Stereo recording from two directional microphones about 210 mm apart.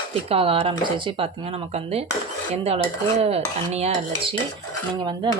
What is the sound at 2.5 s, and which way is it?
Speech, 30° right (ahead or behind).